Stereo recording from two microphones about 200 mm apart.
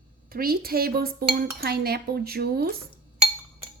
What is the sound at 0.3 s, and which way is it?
Dishes, 50° right (ahead or behind).